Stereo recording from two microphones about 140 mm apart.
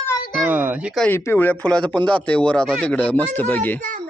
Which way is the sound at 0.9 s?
10° left (ahead or behind).